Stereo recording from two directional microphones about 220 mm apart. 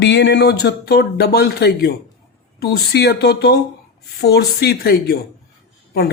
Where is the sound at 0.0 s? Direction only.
55° left (ahead or behind).